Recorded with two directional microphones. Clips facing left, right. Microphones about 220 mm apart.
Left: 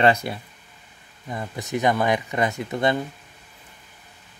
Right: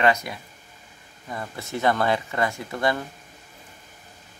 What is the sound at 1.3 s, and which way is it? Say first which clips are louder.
Speech: left 3 dB; 20° left (ahead or behind).